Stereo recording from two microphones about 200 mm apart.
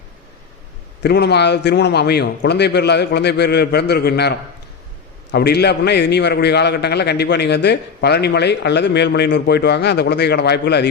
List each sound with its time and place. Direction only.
1.0 s a man's voice: 55° left (ahead or behind)